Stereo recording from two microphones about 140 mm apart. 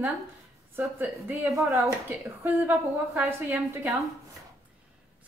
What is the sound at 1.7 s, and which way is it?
Speech, centre (ahead or behind).